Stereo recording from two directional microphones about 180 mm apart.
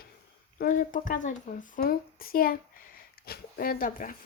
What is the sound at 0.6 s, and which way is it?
Speech, 50° left (ahead or behind).